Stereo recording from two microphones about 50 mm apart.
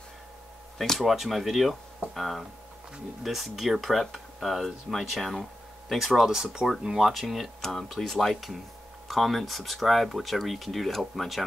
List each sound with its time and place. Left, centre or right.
0.9 s speech: centre